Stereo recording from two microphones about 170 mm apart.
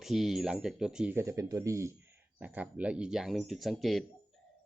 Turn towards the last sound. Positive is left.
turn(degrees=0)  # may be behind; listen again after turning